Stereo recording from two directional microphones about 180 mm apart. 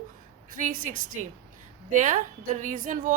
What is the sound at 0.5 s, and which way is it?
A woman's voice, 45° right (ahead or behind).